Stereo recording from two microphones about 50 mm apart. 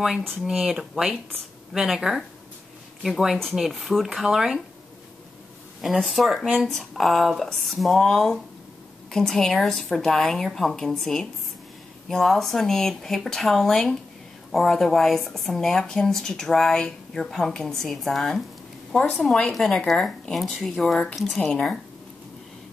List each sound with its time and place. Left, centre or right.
0.6 s speech: centre
5.9 s speech: centre
21.5 s speech: centre